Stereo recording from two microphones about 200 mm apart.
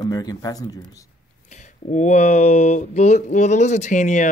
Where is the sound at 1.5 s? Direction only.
35° left (ahead or behind).